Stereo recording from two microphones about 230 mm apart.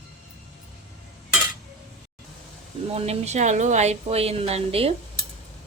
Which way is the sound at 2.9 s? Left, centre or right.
Right.